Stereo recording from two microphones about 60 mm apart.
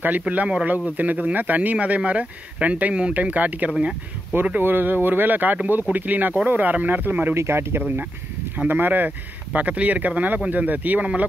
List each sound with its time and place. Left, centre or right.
0.3 s speech: right
7.3 s speech: right